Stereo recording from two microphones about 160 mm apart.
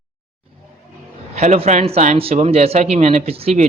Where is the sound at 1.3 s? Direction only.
45° right (ahead or behind).